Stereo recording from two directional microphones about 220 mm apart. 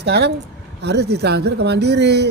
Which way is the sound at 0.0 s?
50° right (ahead or behind).